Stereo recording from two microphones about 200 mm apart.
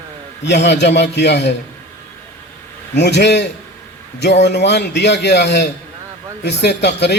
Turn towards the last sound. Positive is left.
turn(degrees=55)  # may be behind; listen again after turning